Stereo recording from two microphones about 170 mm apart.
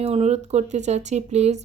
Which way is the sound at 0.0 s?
40° right (ahead or behind).